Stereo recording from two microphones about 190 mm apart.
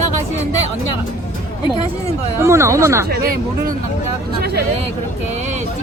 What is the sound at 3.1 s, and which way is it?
Speech, 50° right (ahead or behind).